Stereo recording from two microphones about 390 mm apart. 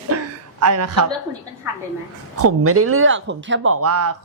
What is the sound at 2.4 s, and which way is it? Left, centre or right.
Speech, right.